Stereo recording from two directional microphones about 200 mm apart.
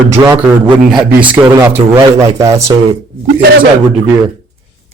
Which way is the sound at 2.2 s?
15° right (ahead or behind).